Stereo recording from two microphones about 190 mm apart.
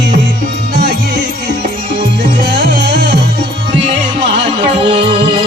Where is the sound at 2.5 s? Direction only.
65° right (ahead or behind).